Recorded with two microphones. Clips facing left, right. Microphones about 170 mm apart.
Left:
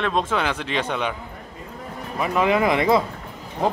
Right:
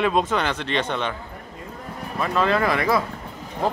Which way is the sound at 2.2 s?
15° left (ahead or behind).